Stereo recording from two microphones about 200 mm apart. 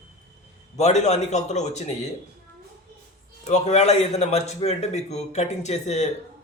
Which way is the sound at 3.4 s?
35° left (ahead or behind).